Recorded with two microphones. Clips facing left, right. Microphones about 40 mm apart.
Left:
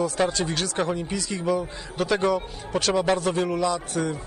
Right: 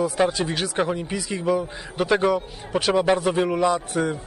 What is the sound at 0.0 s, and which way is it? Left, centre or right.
A man's voice, centre.